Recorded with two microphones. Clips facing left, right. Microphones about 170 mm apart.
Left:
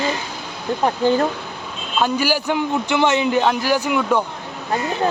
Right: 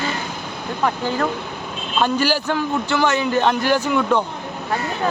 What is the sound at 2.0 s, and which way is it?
Speech, 10° left (ahead or behind).